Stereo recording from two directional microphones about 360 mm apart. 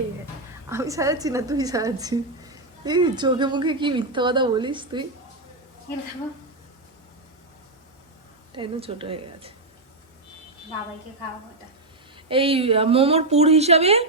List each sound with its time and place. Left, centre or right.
0.7 s a woman's voice: centre
8.5 s a woman's voice: centre
12.1 s a woman's voice: centre